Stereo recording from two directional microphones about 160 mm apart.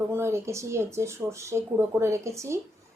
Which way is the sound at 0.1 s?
15° right (ahead or behind).